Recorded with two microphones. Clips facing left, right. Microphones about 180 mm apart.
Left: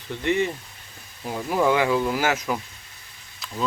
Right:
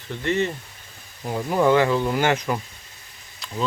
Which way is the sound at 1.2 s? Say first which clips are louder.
Right 2 dB; centre (ahead or behind).